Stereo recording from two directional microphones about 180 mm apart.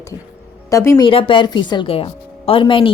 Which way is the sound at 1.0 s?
25° left (ahead or behind).